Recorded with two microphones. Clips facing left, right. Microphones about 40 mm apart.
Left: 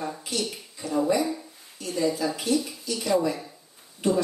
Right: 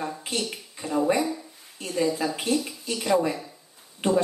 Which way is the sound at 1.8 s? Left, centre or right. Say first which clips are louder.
Right 1 dB; right.